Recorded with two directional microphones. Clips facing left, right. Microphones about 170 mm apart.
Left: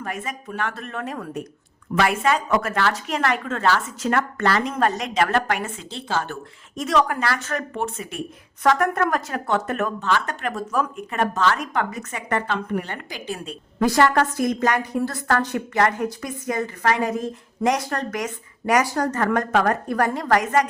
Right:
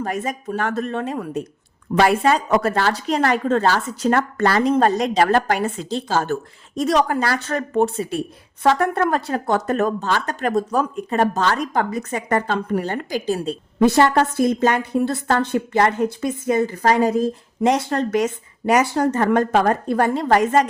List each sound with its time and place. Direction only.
0.0 s a woman's voice: 40° right (ahead or behind); by 1.5 s 25° right (ahead or behind)
2.0 s a woman's voice: 35° right (ahead or behind)
13.7 s a woman's voice: 25° right (ahead or behind)